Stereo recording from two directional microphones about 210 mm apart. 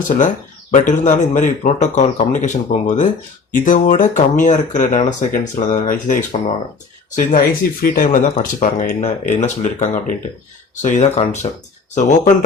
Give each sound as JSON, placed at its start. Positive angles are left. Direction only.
{"t": 0.7, "sound": "speech", "side_deg": 35}